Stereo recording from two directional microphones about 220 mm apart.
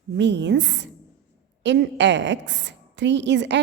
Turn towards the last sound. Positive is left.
turn(degrees=-55)  # may be behind; listen again after turning